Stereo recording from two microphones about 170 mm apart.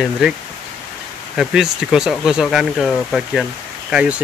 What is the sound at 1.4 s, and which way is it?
Speech, 5° right (ahead or behind).